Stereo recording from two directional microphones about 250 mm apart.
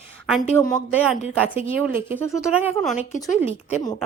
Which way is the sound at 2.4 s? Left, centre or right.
Centre.